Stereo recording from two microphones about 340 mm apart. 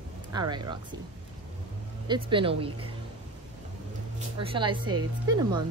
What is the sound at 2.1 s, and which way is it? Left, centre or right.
Speech, centre.